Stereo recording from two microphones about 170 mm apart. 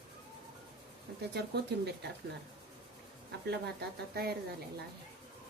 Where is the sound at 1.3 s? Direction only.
80° right.